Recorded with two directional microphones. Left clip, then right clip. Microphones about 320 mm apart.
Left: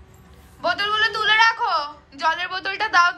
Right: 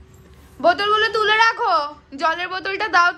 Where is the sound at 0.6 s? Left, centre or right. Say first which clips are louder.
Right 4 dB; centre.